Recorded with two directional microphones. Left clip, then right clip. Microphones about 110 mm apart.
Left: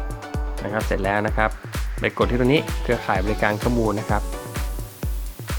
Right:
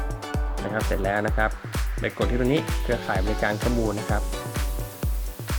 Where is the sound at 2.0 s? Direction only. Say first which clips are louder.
Left 5 dB; 50° left (ahead or behind).